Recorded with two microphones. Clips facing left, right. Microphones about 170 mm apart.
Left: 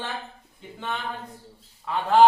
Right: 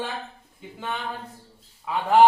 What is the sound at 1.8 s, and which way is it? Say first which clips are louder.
Speech: right 1 dB; 10° right (ahead or behind).